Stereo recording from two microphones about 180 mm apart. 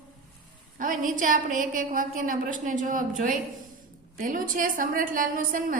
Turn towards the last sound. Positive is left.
turn(degrees=-50)  # may be behind; listen again after turning